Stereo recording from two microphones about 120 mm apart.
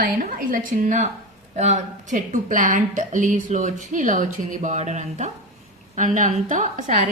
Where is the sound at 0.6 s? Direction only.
90° right.